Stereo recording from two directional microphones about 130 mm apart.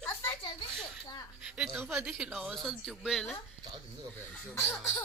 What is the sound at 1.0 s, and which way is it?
Music, 30° left (ahead or behind).